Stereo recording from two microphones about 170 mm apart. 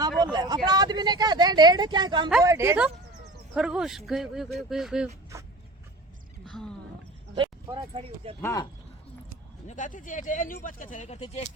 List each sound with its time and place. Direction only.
0.2 s speech: 25° right (ahead or behind)
3.5 s speech: 5° right (ahead or behind)
6.4 s a sound: 5° left (ahead or behind)
7.3 s speech: 30° right (ahead or behind)
8.4 s speech: 15° left (ahead or behind)
9.6 s speech: 45° left (ahead or behind)